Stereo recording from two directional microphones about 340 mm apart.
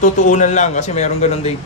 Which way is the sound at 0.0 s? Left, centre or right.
Left.